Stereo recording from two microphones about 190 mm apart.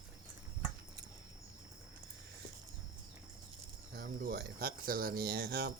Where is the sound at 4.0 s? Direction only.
55° right (ahead or behind).